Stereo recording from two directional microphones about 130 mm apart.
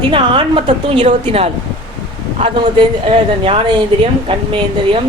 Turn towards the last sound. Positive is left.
turn(degrees=-45)  # may be behind; listen again after turning